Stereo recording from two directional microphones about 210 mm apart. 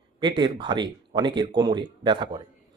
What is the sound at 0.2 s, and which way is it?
Speech, 20° right (ahead or behind).